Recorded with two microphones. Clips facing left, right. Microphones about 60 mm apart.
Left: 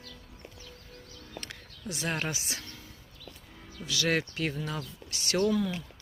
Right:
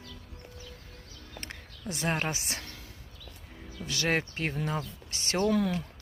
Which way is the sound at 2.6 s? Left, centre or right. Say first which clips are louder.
Right 1 dB; right.